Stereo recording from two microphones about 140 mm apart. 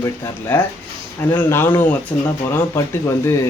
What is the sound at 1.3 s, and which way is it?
Speech, 15° left (ahead or behind).